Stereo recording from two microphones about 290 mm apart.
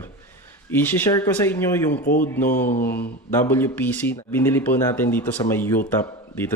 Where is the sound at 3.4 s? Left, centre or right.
Centre.